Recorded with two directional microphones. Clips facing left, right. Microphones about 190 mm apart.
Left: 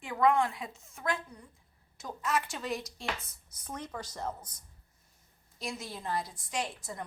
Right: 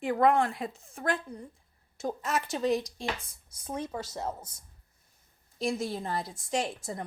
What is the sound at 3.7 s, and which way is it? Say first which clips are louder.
Speech: right 6 dB; 25° right (ahead or behind).